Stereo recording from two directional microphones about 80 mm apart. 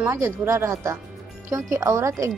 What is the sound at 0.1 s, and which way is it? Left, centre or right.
A woman's voice, right.